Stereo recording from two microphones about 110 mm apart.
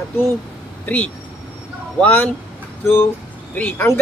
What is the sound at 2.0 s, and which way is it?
Speech, 15° left (ahead or behind).